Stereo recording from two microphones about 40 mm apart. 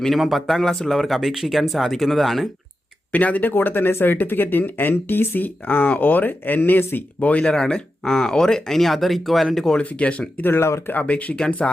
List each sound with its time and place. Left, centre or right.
0.1 s speech: centre
3.1 s speech: left
3.5 s speech: left
5.4 s speech: left
7.2 s speech: left
7.5 s speech: centre
9.8 s speech: left
10.4 s speech: left
11.1 s speech: left
11.6 s speech: centre